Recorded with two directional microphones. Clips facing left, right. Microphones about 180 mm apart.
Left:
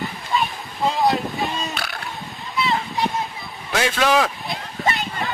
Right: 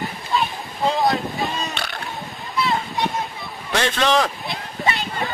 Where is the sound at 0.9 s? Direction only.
Centre (ahead or behind).